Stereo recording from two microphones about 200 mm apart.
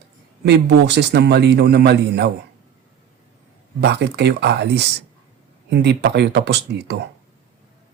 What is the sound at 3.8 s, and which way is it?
Speech, 60° right (ahead or behind).